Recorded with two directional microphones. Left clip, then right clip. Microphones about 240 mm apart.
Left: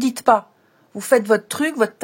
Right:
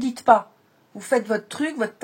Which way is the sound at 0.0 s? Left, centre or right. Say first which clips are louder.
Left 1 dB; left.